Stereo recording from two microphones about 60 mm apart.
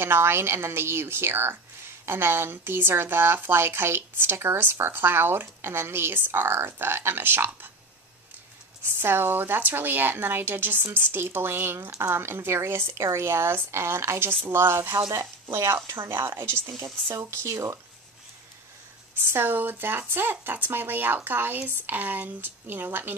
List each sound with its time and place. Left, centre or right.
0.0 s a woman's voice: right
9.0 s a woman's voice: right
16.6 s speech: right
17.2 s speech: right
19.1 s a woman's voice: right